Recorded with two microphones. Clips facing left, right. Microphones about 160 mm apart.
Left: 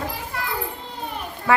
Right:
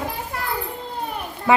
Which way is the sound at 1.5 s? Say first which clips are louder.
Right 2 dB; 15° right (ahead or behind).